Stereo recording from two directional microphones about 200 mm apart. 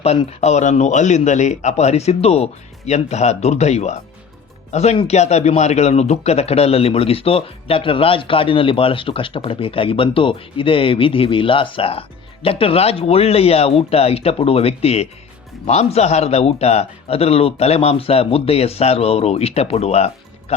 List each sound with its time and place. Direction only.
0.0 s a man's voice: 30° left (ahead or behind)